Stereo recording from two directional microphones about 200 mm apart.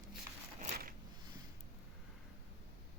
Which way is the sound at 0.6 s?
40° right (ahead or behind).